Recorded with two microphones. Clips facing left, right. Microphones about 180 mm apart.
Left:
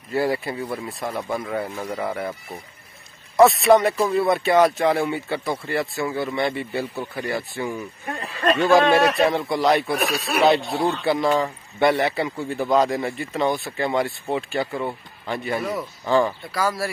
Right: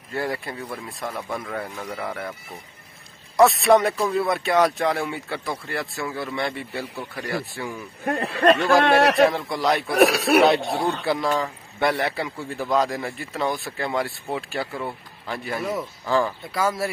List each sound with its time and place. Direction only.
0.1 s a man's voice: 5° left (ahead or behind)
3.3 s a man's voice: centre (ahead or behind)
8.0 s speech: 65° right (ahead or behind)
9.2 s a man's voice: centre (ahead or behind)
10.0 s speech: 65° right (ahead or behind)
11.1 s a man's voice: centre (ahead or behind)
16.5 s speech: 20° right (ahead or behind)